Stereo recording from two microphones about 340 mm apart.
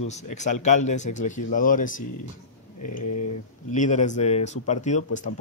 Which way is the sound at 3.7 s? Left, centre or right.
Left.